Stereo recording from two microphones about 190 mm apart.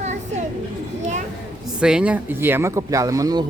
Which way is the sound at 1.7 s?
5° right (ahead or behind).